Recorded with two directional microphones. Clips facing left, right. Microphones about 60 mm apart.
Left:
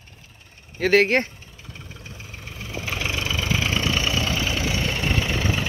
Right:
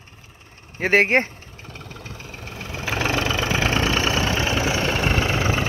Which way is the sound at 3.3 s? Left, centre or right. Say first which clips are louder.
Right 3 dB; right.